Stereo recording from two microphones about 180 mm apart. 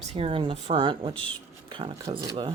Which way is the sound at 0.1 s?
30° right (ahead or behind).